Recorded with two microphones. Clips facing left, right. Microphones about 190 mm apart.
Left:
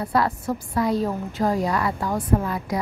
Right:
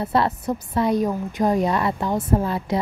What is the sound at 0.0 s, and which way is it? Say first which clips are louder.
A woman's voice: right 1 dB; 25° right (ahead or behind).